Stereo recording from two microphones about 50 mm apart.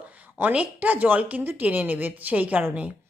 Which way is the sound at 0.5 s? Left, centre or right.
Right.